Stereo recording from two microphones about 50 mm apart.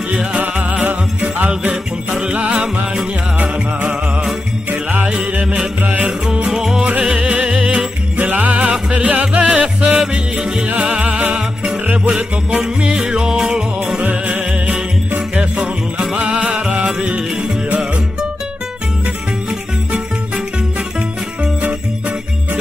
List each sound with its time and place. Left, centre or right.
0.8 s music: right
5.0 s music: right
6.0 s music: centre
8.2 s music: right
8.5 s music: centre
8.9 s music: right
12.4 s music: centre
14.0 s music: right
16.0 s music: centre